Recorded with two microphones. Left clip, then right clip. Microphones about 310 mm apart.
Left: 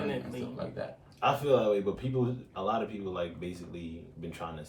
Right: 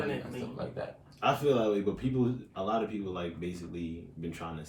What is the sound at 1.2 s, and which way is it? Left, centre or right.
Speech, centre.